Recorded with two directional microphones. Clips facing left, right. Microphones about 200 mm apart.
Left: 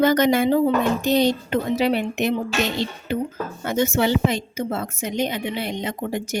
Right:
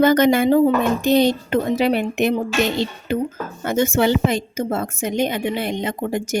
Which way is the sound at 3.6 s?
50° right (ahead or behind).